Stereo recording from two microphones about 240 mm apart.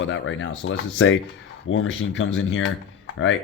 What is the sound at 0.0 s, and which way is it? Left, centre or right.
Speech, left.